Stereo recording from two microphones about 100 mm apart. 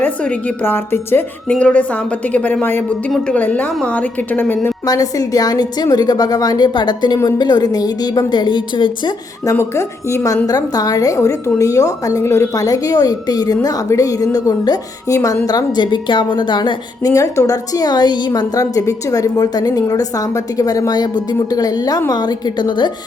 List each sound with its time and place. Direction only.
0.0 s a woman's voice: 10° left (ahead or behind)
1.5 s a woman's voice: 10° left (ahead or behind)
4.9 s a woman's voice: 40° left (ahead or behind)
9.4 s a woman's voice: 30° left (ahead or behind); by 22.9 s 50° left (ahead or behind)